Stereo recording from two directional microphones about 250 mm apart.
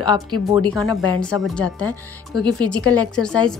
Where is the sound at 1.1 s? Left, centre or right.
Centre.